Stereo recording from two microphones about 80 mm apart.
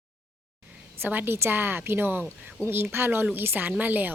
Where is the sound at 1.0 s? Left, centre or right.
Right.